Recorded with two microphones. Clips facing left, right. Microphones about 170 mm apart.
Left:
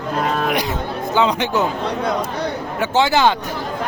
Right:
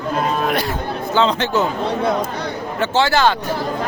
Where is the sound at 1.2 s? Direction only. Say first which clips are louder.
Right 1 dB; 15° left (ahead or behind).